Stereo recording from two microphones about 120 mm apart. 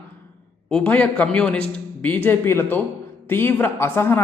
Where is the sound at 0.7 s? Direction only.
15° left (ahead or behind).